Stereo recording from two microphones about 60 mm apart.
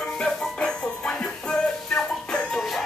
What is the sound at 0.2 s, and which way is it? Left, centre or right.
Music, centre.